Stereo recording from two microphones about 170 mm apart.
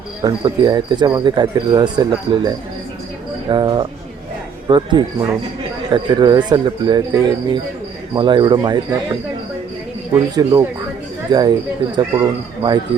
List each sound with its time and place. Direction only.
0.2 s cricket: 25° right (ahead or behind)
3.5 s cricket: 25° right (ahead or behind)
10.3 s speech: 15° right (ahead or behind)
11.3 s cricket: 25° right (ahead or behind)